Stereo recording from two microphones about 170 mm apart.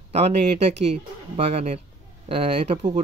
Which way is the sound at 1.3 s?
40° right (ahead or behind).